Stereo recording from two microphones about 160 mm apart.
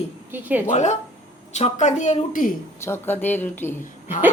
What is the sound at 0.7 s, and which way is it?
Speech, 45° left (ahead or behind).